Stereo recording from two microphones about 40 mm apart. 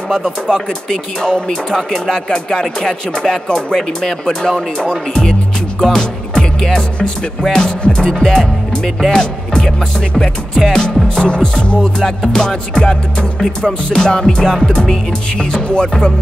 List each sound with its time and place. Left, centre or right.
0.5 s speech: centre
5.8 s music: centre
7.8 s speech: centre
11.1 s music: left
12.4 s speech: centre
13.9 s speech: centre
15.7 s music: left